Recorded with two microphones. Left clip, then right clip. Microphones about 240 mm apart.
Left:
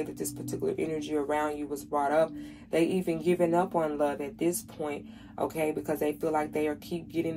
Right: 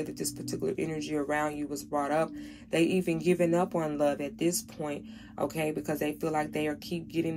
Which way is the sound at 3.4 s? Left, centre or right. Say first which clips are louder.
Left 1 dB; right.